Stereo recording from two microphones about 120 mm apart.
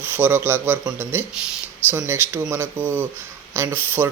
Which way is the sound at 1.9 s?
20° right (ahead or behind).